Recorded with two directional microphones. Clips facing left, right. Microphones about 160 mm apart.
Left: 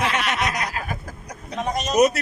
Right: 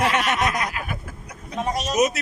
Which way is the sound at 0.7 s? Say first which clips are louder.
Left 1 dB; 35° left (ahead or behind).